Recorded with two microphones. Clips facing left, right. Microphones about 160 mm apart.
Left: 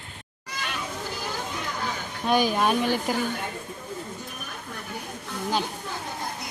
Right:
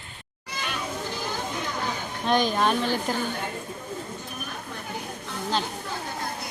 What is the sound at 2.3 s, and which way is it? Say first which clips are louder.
Speech: left 1 dB; 10° left (ahead or behind).